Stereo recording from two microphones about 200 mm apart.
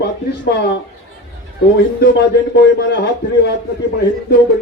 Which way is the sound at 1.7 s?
55° left (ahead or behind).